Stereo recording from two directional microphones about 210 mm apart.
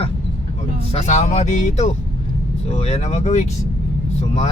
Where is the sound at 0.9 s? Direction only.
30° left (ahead or behind).